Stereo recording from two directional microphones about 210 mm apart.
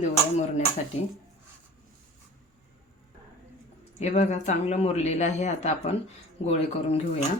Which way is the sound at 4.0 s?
35° left (ahead or behind).